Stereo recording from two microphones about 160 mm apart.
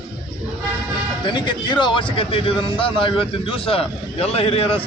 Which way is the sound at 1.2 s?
30° left (ahead or behind).